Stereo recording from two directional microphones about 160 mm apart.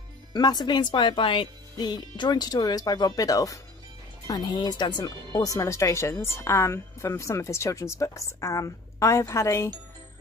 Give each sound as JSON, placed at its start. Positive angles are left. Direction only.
{"t": 0.3, "sound": "speech", "side_deg": 25}